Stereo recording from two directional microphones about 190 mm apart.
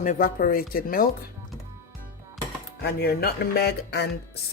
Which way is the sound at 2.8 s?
55° left (ahead or behind).